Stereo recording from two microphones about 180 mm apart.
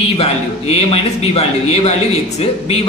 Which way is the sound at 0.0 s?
35° left (ahead or behind).